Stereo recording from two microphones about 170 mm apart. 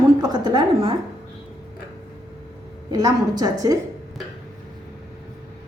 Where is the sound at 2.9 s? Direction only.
25° right (ahead or behind).